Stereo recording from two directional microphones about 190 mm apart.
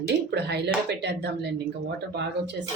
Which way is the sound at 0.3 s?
60° right (ahead or behind).